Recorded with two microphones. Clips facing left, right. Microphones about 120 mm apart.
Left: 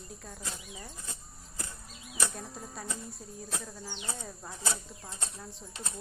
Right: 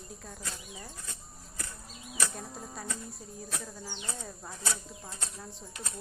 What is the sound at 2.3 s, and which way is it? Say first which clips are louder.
Speech: right 1 dB; centre (ahead or behind).